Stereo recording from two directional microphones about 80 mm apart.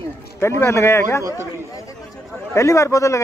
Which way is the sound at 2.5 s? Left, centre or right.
Left.